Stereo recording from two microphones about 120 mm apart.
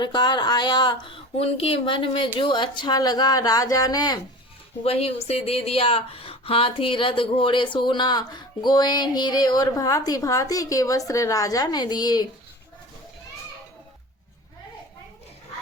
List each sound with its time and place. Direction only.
0.0 s speech: 40° left (ahead or behind)
4.8 s speech: 55° left (ahead or behind); by 12.3 s 35° left (ahead or behind)